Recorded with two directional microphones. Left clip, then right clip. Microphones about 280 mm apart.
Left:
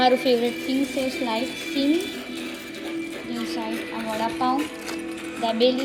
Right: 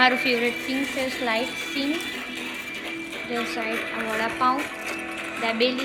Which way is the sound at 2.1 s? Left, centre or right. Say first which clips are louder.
Right 2 dB; centre.